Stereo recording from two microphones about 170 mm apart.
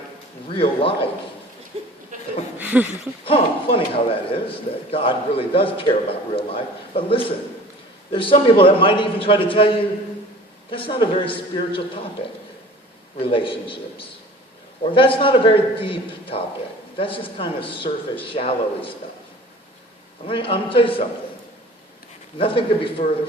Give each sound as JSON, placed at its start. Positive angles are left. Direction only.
{"t": 0.5, "sound": "a man's voice", "side_deg": 30}
{"t": 1.7, "sound": "speech", "side_deg": -35}
{"t": 2.6, "sound": "a sound", "side_deg": -10}
{"t": 3.2, "sound": "a man's voice", "side_deg": 30}
{"t": 13.1, "sound": "a man's voice", "side_deg": 30}
{"t": 20.2, "sound": "a man's voice", "side_deg": 30}
{"t": 22.4, "sound": "a man's voice", "side_deg": 30}